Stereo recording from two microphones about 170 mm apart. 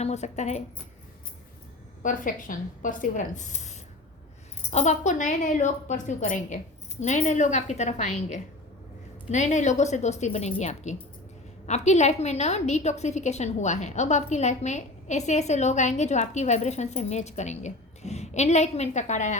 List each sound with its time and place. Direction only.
0.0 s a woman's voice: 40° left (ahead or behind)
2.0 s a woman's voice: 50° left (ahead or behind)